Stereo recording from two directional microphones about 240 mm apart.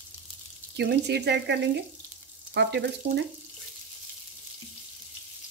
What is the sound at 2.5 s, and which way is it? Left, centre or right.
Frying, right.